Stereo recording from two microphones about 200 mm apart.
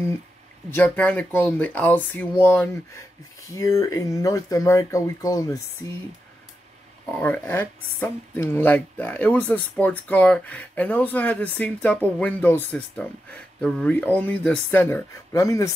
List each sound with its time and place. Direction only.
0.7 s speech: 5° left (ahead or behind)
7.1 s speech: 10° left (ahead or behind)